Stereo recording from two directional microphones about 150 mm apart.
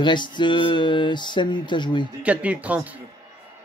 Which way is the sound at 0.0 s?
30° left (ahead or behind).